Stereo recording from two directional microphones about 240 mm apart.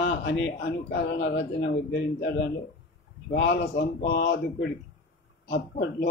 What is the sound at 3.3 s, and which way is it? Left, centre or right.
Speech, left.